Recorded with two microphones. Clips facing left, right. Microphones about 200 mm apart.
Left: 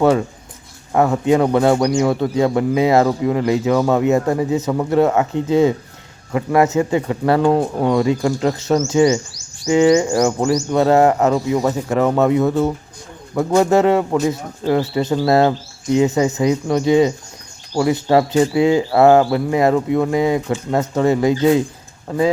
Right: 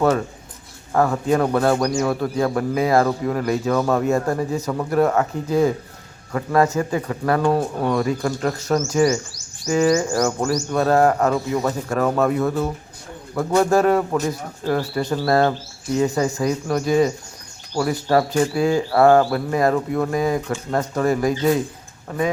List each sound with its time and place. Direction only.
0.9 s speech: 20° left (ahead or behind)
10.1 s speech: 15° left (ahead or behind)